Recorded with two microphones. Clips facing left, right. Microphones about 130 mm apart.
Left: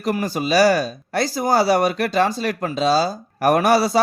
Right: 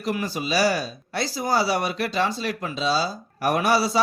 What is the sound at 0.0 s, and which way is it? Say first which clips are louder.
Speech: left 5 dB; 45° left (ahead or behind).